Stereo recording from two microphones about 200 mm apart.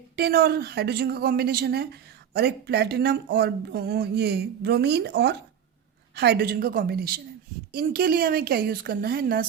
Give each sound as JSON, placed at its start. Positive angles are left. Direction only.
{"t": 0.2, "sound": "a woman's voice", "side_deg": -55}